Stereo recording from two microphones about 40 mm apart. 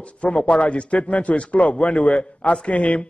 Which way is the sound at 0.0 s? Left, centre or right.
Left.